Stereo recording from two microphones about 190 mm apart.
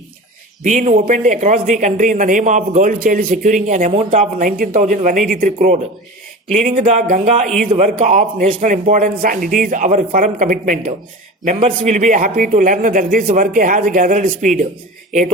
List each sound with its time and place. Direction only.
0.6 s speech: 40° right (ahead or behind)
7.4 s a man's voice: centre (ahead or behind)
7.9 s a man's voice: 40° right (ahead or behind)